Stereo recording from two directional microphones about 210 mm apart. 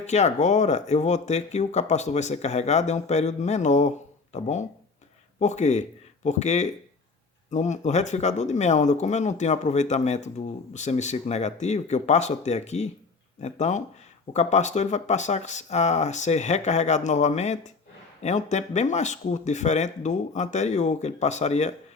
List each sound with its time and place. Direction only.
0.0 s speech: 30° left (ahead or behind)